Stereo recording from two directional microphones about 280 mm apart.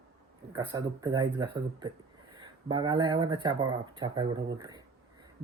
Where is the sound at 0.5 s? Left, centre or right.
Centre.